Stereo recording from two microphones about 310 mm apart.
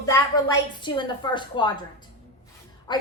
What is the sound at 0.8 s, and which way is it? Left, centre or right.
Speech, centre.